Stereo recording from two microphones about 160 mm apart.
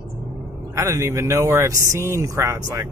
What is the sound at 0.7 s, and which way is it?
Speech, 20° right (ahead or behind).